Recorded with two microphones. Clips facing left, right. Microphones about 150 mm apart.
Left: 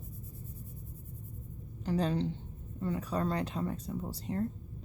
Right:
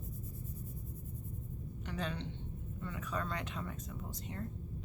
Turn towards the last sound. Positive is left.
turn(degrees=35)  # may be behind; listen again after turning